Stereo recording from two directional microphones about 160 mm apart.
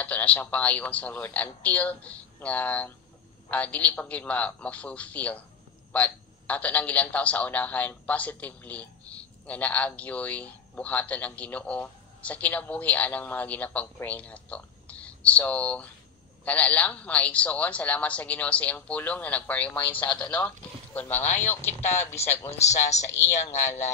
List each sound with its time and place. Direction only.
0.0 s a man's voice: 10° left (ahead or behind)
22.5 s speech: 45° left (ahead or behind)